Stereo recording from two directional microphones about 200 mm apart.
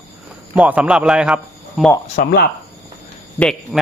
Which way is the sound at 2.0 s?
45° left (ahead or behind).